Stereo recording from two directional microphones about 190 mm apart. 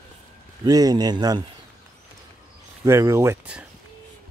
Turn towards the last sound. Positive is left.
turn(degrees=-10)  # may be behind; listen again after turning